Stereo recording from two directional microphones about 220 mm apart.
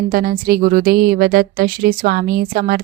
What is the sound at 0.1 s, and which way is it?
A woman's voice, 40° right (ahead or behind).